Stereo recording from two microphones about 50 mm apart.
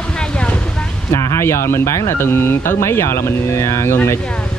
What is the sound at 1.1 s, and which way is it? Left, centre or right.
Speech, left.